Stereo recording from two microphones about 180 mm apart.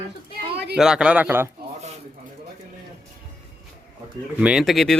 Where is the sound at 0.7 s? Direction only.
5° right (ahead or behind).